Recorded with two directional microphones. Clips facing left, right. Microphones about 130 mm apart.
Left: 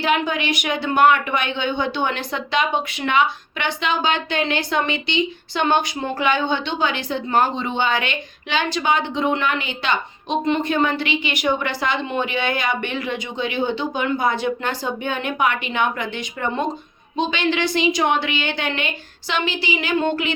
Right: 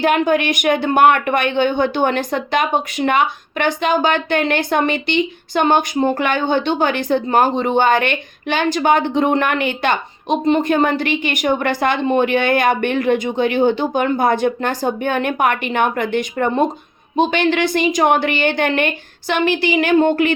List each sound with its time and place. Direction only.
0.0 s a woman's voice: 50° right (ahead or behind)